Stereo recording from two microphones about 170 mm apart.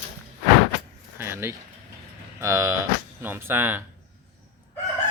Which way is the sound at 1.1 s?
15° right (ahead or behind).